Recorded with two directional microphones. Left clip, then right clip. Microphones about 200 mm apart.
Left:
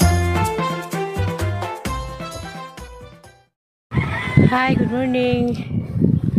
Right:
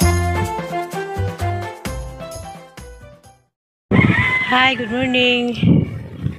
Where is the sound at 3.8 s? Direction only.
55° left (ahead or behind).